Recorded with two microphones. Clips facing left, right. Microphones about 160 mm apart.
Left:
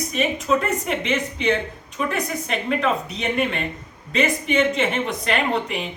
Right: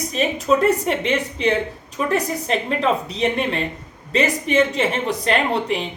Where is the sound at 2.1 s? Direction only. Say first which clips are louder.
Right 6 dB; 35° right (ahead or behind).